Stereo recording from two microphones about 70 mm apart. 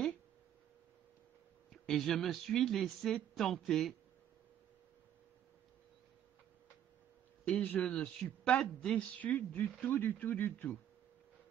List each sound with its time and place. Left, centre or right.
1.7 s speech: centre
7.4 s speech: left
9.2 s speech: left